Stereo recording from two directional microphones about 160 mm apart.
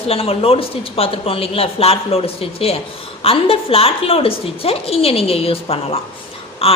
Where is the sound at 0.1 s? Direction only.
35° left (ahead or behind).